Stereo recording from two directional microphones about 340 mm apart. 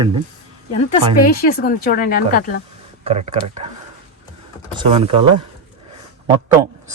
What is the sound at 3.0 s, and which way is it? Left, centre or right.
Speech, centre.